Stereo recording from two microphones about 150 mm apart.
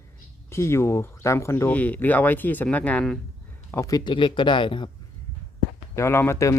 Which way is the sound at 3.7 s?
20° left (ahead or behind).